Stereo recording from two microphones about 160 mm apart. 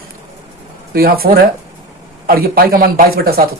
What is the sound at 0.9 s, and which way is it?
Speech, 70° right (ahead or behind).